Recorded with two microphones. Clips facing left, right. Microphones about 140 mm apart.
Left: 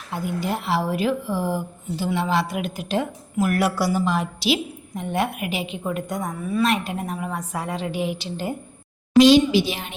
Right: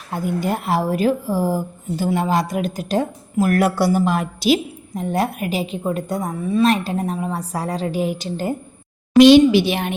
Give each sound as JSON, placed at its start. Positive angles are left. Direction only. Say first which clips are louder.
{"t": 0.1, "sound": "speech", "louder": "right 4 dB", "side_deg": -50}
{"t": 3.8, "sound": "a woman's voice", "louder": "right 4 dB", "side_deg": -55}
{"t": 9.1, "sound": "a woman's voice", "louder": "right 4 dB", "side_deg": -60}